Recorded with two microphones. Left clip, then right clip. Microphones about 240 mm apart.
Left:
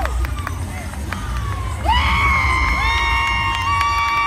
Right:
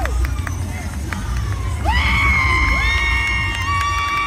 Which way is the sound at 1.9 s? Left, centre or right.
Left.